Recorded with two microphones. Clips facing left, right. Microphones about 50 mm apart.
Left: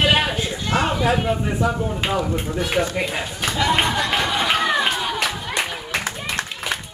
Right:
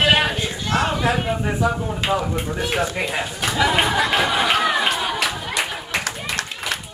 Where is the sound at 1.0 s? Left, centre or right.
Centre.